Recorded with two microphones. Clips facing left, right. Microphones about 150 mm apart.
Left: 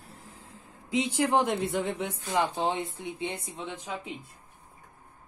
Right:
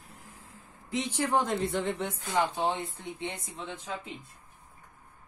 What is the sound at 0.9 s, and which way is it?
Speech, 10° left (ahead or behind).